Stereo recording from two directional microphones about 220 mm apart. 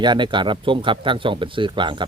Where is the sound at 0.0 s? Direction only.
20° right (ahead or behind).